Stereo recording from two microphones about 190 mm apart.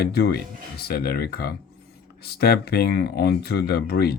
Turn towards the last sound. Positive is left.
turn(degrees=55)  # may be behind; listen again after turning